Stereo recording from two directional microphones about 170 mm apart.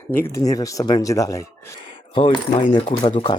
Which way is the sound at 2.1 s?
30° left (ahead or behind).